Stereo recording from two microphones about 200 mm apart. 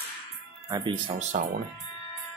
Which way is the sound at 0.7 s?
25° right (ahead or behind).